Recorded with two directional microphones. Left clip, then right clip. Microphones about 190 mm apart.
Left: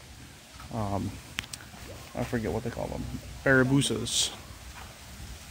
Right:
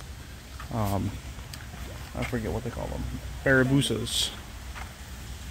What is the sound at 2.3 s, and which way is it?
Speech, 20° left (ahead or behind).